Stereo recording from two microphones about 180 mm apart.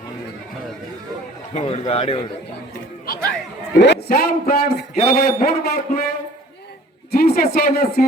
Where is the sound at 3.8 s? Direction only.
65° left (ahead or behind).